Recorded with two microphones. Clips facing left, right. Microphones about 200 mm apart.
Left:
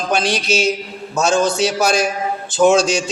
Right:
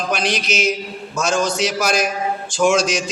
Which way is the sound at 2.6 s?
30° left (ahead or behind).